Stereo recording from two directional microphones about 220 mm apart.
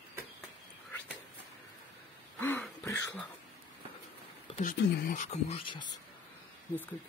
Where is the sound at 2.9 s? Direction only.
10° left (ahead or behind).